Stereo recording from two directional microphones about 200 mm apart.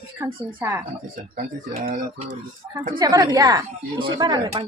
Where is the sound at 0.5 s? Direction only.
15° right (ahead or behind).